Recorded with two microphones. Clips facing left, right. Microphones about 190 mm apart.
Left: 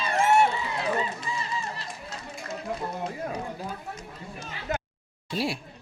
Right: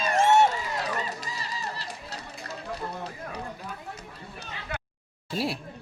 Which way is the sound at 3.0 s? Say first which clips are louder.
Left 5 dB; 30° left (ahead or behind).